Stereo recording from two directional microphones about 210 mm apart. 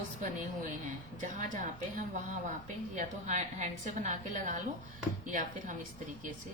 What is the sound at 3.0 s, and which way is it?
A woman's voice, 35° right (ahead or behind).